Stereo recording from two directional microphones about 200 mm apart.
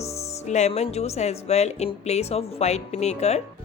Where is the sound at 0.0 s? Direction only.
30° left (ahead or behind).